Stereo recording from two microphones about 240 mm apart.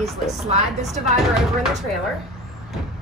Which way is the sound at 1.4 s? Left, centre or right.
Centre.